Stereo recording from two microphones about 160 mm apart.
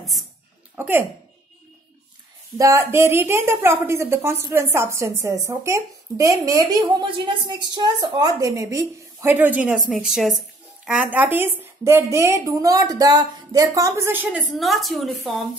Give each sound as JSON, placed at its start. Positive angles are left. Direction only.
{"t": 0.7, "sound": "a woman's voice", "side_deg": -10}
{"t": 2.5, "sound": "a woman's voice", "side_deg": -20}
{"t": 14.4, "sound": "a woman's voice", "side_deg": 0}